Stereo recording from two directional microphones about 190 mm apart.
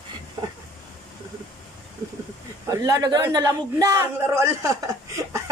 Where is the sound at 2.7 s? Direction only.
20° right (ahead or behind).